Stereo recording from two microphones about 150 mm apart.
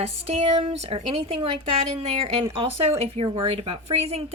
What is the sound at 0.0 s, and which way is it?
A woman's voice, 45° right (ahead or behind).